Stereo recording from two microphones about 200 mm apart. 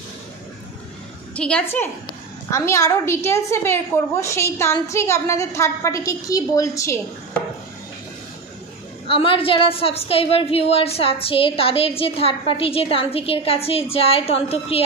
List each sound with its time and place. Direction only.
1.3 s a woman's voice: 5° left (ahead or behind)
9.0 s a woman's voice: 25° left (ahead or behind)